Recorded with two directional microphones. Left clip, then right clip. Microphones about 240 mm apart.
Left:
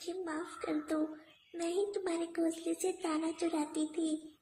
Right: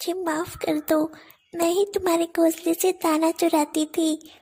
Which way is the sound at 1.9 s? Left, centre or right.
Right.